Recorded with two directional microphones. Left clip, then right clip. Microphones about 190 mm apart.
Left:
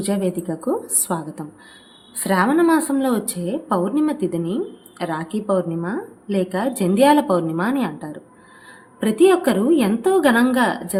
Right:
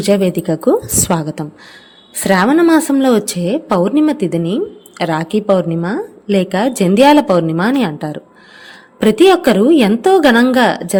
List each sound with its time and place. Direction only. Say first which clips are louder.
0.0 s a woman's voice: right 10 dB; 40° right (ahead or behind)